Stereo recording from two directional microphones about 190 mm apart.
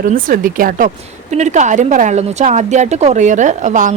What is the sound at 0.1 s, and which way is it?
Speech, 45° right (ahead or behind).